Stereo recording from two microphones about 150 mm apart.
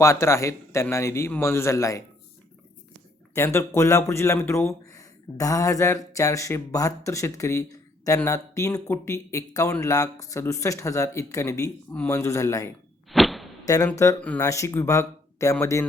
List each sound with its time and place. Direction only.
0.0 s speech: 20° left (ahead or behind)
3.3 s speech: 20° left (ahead or behind)
13.1 s whip: centre (ahead or behind)
13.7 s speech: 20° left (ahead or behind)